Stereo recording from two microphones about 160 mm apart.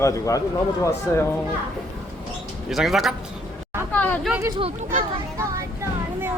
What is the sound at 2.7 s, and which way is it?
Speech, centre (ahead or behind).